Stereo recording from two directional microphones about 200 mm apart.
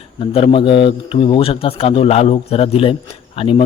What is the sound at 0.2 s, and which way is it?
A man's voice, 30° left (ahead or behind).